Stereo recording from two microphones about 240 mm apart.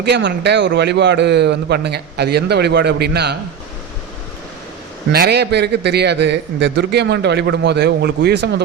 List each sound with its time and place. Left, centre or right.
0.0 s a man's voice: right
5.1 s a man's voice: right